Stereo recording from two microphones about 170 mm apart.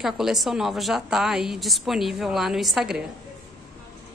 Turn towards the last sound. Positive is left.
turn(degrees=-5)  # may be behind; listen again after turning